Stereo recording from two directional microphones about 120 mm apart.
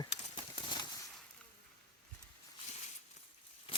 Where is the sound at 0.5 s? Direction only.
40° left (ahead or behind).